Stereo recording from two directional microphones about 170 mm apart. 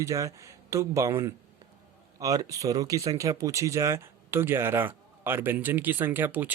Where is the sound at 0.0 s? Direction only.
20° right (ahead or behind).